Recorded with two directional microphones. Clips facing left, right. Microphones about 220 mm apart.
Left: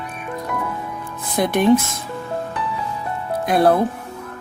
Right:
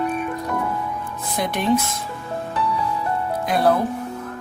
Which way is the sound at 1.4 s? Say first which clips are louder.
Left 6 dB; 50° left (ahead or behind).